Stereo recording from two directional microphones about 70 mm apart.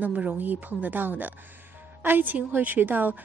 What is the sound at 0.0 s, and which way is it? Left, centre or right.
A woman's voice, centre.